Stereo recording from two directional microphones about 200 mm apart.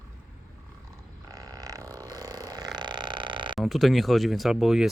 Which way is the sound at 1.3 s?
20° right (ahead or behind).